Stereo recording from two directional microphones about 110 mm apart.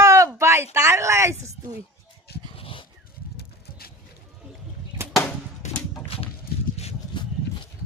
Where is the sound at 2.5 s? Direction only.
55° left (ahead or behind).